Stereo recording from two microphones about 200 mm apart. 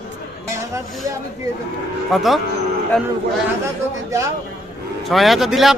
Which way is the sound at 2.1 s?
Centre (ahead or behind).